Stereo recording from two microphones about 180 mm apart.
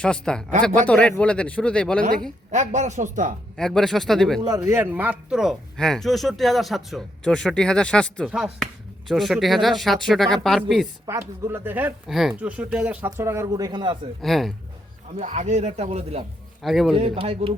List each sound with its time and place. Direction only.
0.0 s speech: 5° left (ahead or behind)
2.5 s speech: 40° right (ahead or behind)
3.6 s speech: centre (ahead or behind)
4.4 s speech: 20° right (ahead or behind); by 10.8 s centre (ahead or behind)
11.0 s speech: 15° right (ahead or behind)
14.2 s speech: centre (ahead or behind)
15.1 s speech: 40° right (ahead or behind)
16.6 s speech: centre (ahead or behind)
16.9 s speech: 30° right (ahead or behind)